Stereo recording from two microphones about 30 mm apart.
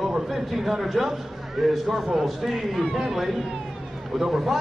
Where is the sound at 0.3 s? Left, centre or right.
Centre.